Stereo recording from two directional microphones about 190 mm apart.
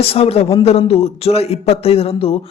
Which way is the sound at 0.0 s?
30° left (ahead or behind).